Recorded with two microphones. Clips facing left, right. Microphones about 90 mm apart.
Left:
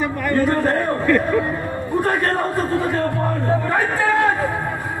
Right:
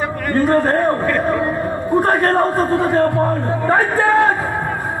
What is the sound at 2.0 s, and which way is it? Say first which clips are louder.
A man's voice: right 5 dB; 40° right (ahead or behind).